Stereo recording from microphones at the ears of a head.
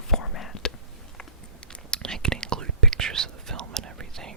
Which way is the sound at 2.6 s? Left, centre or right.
Right.